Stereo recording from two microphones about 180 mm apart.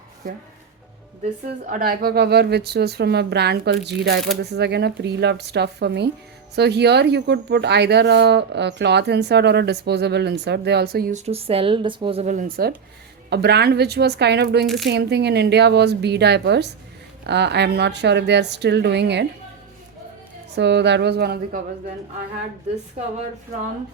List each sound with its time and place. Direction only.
1.7 s a woman's voice: 55° right (ahead or behind)
11.1 s speech: 35° right (ahead or behind); by 12.7 s 50° right (ahead or behind)
13.3 s speech: 65° right (ahead or behind)
20.6 s speech: 75° right (ahead or behind)